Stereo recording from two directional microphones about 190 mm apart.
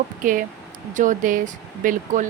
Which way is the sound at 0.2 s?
45° right (ahead or behind).